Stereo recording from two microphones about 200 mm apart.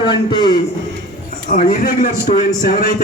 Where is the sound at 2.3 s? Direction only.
35° left (ahead or behind).